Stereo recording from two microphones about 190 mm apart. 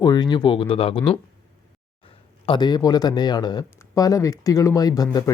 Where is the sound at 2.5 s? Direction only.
20° left (ahead or behind).